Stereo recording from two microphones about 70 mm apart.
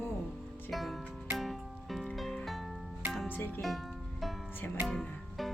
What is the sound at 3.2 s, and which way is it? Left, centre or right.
Speech, left.